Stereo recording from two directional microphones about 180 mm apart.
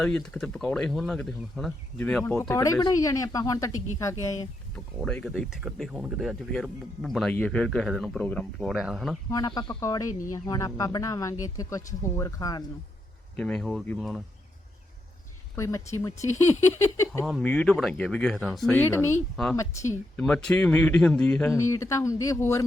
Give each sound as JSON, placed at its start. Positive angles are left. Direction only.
{"t": 0.0, "sound": "speech", "side_deg": 5}
{"t": 2.5, "sound": "speech", "side_deg": 15}
{"t": 4.7, "sound": "speech", "side_deg": 5}
{"t": 9.6, "sound": "speech", "side_deg": 20}
{"t": 13.3, "sound": "speech", "side_deg": 5}
{"t": 15.5, "sound": "speech", "side_deg": 15}
{"t": 16.1, "sound": "speech", "side_deg": 40}
{"t": 16.7, "sound": "speech", "side_deg": 15}
{"t": 20.1, "sound": "speech", "side_deg": 5}
{"t": 21.5, "sound": "speech", "side_deg": 15}